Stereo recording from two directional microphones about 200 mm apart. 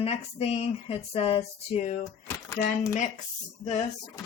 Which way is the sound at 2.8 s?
35° left (ahead or behind).